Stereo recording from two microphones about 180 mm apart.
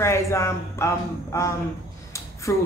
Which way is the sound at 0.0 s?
15° left (ahead or behind).